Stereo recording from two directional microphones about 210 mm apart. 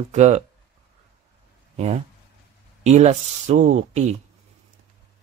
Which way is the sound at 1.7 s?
30° right (ahead or behind).